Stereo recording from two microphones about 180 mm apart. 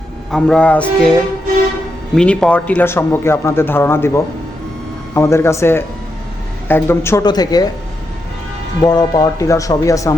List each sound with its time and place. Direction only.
0.3 s music: 5° left (ahead or behind)
2.1 s speech: 5° left (ahead or behind); by 7.7 s 20° left (ahead or behind)
8.8 s speech: 20° left (ahead or behind)